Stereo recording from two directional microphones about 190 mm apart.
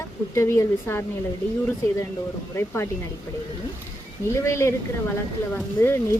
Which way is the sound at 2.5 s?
15° left (ahead or behind).